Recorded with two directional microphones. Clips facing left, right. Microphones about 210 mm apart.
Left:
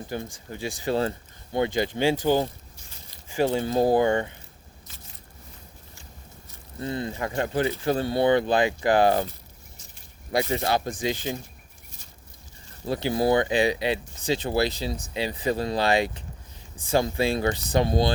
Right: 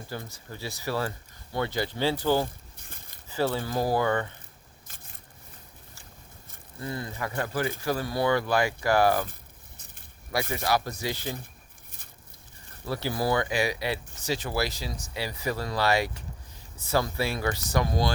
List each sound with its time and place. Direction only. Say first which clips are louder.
0.1 s speech: left 5 dB; 20° left (ahead or behind)
2.7 s a sound: even; 55° right (ahead or behind)
3.2 s speech: left 4 dB; 15° left (ahead or behind)
6.7 s speech: left 5 dB; 25° left (ahead or behind)
10.5 s speech: left 2 dB; 25° left (ahead or behind)
12.8 s speech: left 5 dB; 20° left (ahead or behind)